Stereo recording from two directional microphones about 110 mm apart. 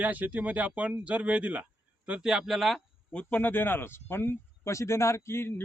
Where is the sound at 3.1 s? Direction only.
15° left (ahead or behind).